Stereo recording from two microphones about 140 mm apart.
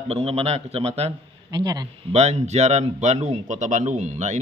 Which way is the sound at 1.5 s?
30° right (ahead or behind).